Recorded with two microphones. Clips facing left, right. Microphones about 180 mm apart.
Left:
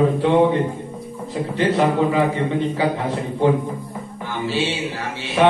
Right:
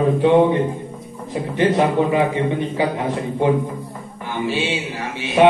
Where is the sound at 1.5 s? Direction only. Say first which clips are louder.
Right 1 dB; 15° right (ahead or behind).